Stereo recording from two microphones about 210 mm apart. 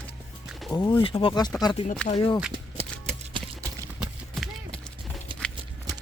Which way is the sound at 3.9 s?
5° right (ahead or behind).